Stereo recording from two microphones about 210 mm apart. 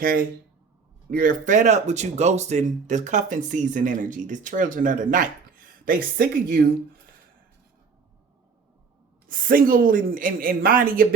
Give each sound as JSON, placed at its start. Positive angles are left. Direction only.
{"t": 0.0, "sound": "speech", "side_deg": -45}
{"t": 9.2, "sound": "speech", "side_deg": -40}